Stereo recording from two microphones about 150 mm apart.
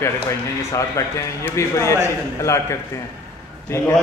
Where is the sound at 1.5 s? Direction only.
20° left (ahead or behind).